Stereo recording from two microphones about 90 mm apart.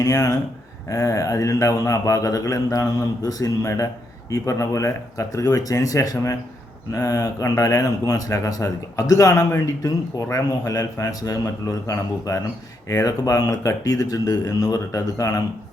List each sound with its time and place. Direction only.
0.0 s a man's voice: 40° left (ahead or behind)